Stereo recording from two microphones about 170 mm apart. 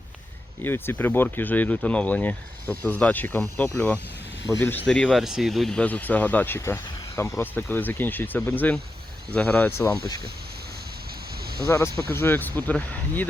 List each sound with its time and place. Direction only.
0.6 s speech: 10° left (ahead or behind)
11.6 s speech: 15° left (ahead or behind)